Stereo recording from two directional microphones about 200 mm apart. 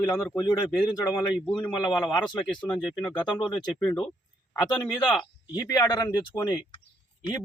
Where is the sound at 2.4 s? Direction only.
5° left (ahead or behind).